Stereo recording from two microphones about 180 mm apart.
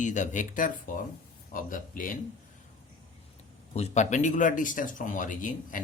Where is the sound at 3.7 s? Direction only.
40° left (ahead or behind).